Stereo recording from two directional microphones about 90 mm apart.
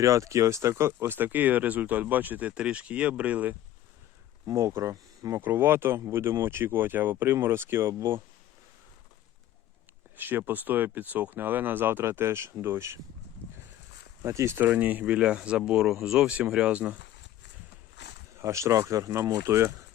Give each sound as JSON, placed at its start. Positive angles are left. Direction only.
{"t": 0.0, "sound": "speech", "side_deg": -35}
{"t": 4.4, "sound": "speech", "side_deg": -35}
{"t": 5.4, "sound": "speech", "side_deg": -25}
{"t": 10.2, "sound": "speech", "side_deg": -20}
{"t": 14.2, "sound": "speech", "side_deg": -35}
{"t": 18.3, "sound": "speech", "side_deg": -30}